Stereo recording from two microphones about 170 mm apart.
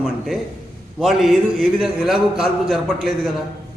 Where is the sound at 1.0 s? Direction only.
Centre (ahead or behind).